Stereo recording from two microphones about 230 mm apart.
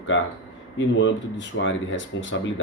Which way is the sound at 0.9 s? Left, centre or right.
Left.